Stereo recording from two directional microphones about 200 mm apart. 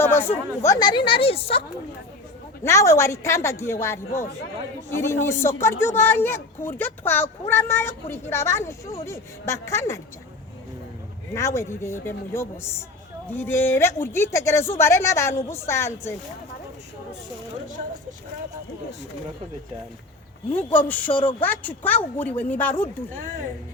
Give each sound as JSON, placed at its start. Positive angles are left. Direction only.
{"t": 0.0, "sound": "a sound", "side_deg": 10}
{"t": 0.6, "sound": "speech", "side_deg": 20}
{"t": 2.6, "sound": "speech", "side_deg": 15}
{"t": 11.3, "sound": "speech", "side_deg": 15}
{"t": 20.5, "sound": "speech", "side_deg": 10}
{"t": 21.1, "sound": "speech", "side_deg": 25}
{"t": 21.4, "sound": "speech", "side_deg": 10}